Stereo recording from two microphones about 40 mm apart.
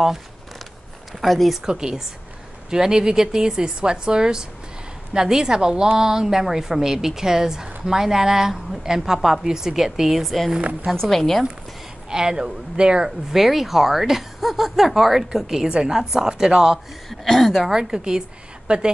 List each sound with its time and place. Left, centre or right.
1.2 s speech: centre
1.7 s a woman's voice: right
10.2 s speech: centre
12.1 s speech: centre
13.3 s a woman's voice: centre
17.1 s speech: centre
17.5 s a woman's voice: centre
18.7 s speech: right